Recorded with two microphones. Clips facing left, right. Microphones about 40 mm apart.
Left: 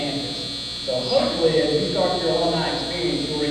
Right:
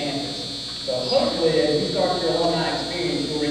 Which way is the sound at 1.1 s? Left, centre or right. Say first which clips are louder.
Left 1 dB; left.